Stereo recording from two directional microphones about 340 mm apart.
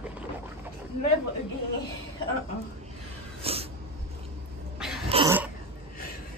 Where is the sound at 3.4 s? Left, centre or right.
Centre.